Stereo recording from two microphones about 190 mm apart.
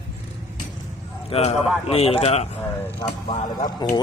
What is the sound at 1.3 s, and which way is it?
Speech, 35° left (ahead or behind).